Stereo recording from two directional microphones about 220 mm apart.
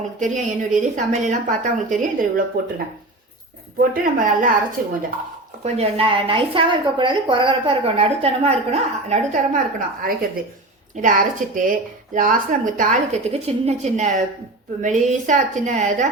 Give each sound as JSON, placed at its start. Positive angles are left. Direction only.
{"t": 0.2, "sound": "a woman's voice", "side_deg": -35}
{"t": 3.9, "sound": "a woman's voice", "side_deg": -35}
{"t": 5.6, "sound": "a woman's voice", "side_deg": -30}